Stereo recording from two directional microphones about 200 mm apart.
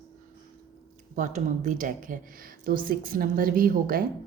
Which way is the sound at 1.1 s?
40° right (ahead or behind).